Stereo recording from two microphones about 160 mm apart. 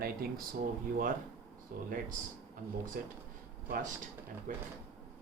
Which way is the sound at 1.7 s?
65° right (ahead or behind).